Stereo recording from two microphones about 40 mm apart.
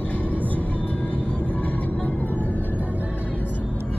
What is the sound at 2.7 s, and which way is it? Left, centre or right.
Music, right.